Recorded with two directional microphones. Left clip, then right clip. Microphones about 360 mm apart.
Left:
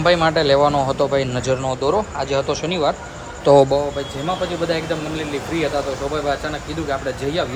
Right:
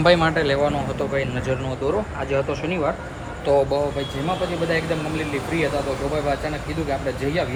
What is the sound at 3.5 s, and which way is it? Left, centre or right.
Speech, left.